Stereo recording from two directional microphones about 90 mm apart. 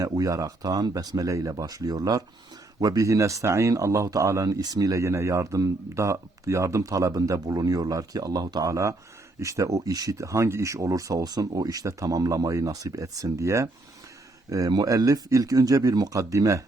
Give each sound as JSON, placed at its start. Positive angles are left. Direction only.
{"t": 0.2, "sound": "speech", "side_deg": -40}